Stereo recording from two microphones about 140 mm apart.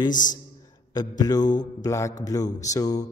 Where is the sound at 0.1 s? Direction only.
65° left (ahead or behind).